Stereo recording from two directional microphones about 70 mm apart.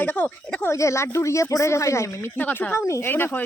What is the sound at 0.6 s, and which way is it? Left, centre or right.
Speech, left.